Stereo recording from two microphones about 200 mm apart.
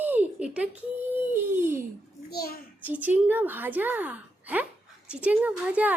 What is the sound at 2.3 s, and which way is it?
Speech, 50° left (ahead or behind).